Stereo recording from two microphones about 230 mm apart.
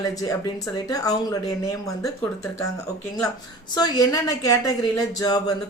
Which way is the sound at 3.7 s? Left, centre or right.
Centre.